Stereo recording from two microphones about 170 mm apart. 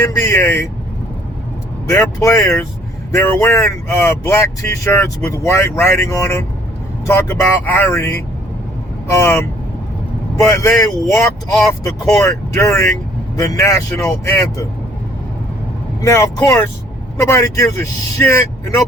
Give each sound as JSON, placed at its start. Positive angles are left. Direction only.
{"t": 0.0, "sound": "speech", "side_deg": 15}
{"t": 1.9, "sound": "speech", "side_deg": 20}
{"t": 16.0, "sound": "speech", "side_deg": 20}